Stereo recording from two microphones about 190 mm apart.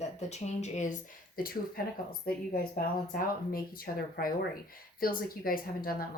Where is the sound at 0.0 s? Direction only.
35° left (ahead or behind).